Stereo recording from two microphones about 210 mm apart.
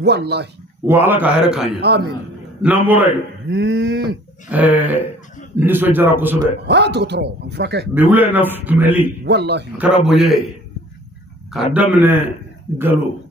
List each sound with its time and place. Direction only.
0.0 s speech: 50° right (ahead or behind)
0.8 s speech: 10° right (ahead or behind)
1.8 s speech: 50° right (ahead or behind)
2.6 s speech: 10° right (ahead or behind)
3.4 s speech: 55° right (ahead or behind)
4.5 s speech: 5° right (ahead or behind)
6.7 s speech: 50° right (ahead or behind)
7.9 s speech: 10° right (ahead or behind)
9.2 s speech: 50° right (ahead or behind)
10.0 s a man's voice: centre (ahead or behind)
11.5 s speech: 5° right (ahead or behind)